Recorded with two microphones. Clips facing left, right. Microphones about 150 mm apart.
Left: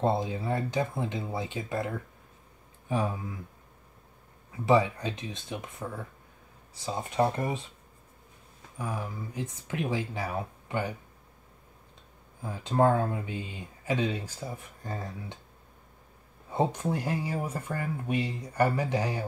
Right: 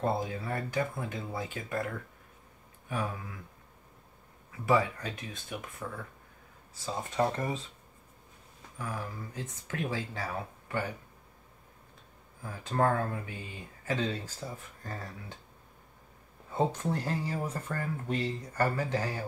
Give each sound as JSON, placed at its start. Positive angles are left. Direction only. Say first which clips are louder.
{"t": 0.0, "sound": "speech", "louder": "left 4 dB", "side_deg": 20}
{"t": 4.5, "sound": "speech", "louder": "left 4 dB", "side_deg": 20}
{"t": 8.7, "sound": "speech", "louder": "left 3 dB", "side_deg": 15}
{"t": 12.4, "sound": "speech", "louder": "left 4 dB", "side_deg": 20}
{"t": 16.4, "sound": "speech", "louder": "left 2 dB", "side_deg": 15}